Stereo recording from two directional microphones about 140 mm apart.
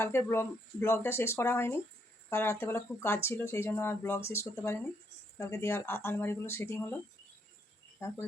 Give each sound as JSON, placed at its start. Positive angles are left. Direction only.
{"t": 0.0, "sound": "speech", "side_deg": 15}
{"t": 8.0, "sound": "speech", "side_deg": 15}